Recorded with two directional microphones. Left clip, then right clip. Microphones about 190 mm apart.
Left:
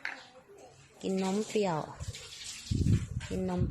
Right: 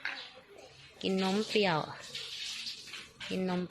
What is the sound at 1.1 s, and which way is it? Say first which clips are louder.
Speech: right 1 dB; 10° right (ahead or behind).